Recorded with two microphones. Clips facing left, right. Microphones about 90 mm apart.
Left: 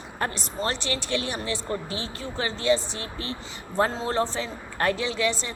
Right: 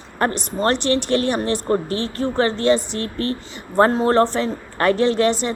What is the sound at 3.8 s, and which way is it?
Speech, 60° right (ahead or behind).